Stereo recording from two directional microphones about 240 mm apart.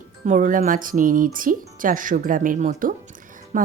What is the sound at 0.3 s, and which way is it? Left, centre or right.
Speech, right.